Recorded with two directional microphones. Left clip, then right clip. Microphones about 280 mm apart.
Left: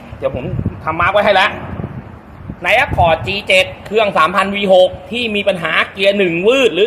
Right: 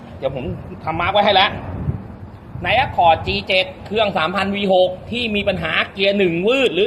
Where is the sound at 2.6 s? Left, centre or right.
Left.